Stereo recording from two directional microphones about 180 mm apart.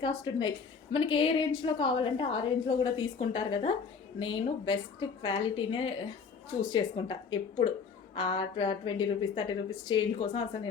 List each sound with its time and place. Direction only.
0.0 s a woman's voice: 25° left (ahead or behind)